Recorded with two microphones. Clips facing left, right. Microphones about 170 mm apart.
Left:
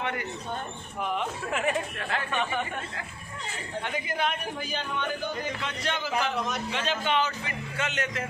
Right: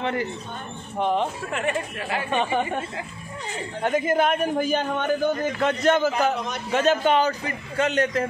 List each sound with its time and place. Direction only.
0.0 s a man's voice: 30° right (ahead or behind)
1.5 s speech: centre (ahead or behind)
3.8 s a man's voice: 45° right (ahead or behind)